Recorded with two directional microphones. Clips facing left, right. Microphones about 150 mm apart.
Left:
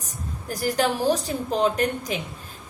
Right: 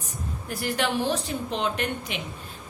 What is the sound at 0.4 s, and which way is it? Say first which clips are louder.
A woman's voice: left 4 dB; 40° left (ahead or behind).